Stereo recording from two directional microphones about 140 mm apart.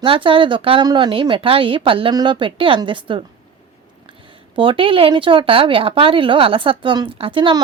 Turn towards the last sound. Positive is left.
turn(degrees=-35)  # may be behind; listen again after turning